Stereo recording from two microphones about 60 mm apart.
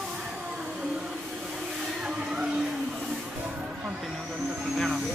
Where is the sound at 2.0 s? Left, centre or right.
Centre.